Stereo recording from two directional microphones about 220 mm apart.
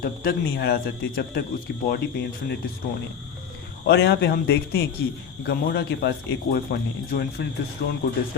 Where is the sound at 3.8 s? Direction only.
50° left (ahead or behind).